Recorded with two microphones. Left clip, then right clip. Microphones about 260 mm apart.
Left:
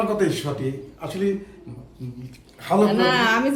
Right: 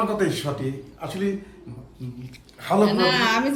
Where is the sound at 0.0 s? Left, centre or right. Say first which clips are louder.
Left 1 dB; centre.